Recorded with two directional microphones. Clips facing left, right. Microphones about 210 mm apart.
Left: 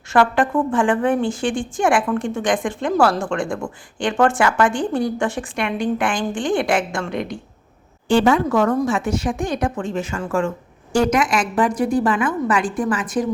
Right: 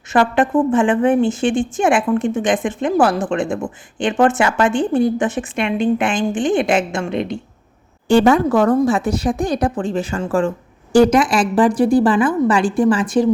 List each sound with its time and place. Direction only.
0.1 s a woman's voice: 20° right (ahead or behind)
8.0 s speech: 40° right (ahead or behind)